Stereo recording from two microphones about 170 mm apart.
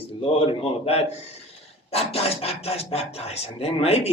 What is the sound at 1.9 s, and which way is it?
Speech, 35° left (ahead or behind).